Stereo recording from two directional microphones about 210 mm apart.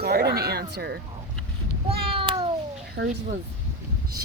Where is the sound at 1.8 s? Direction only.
25° right (ahead or behind).